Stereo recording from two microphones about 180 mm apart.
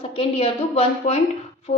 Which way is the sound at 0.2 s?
30° left (ahead or behind).